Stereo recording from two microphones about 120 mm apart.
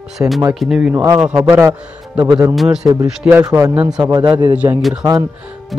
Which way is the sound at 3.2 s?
20° right (ahead or behind).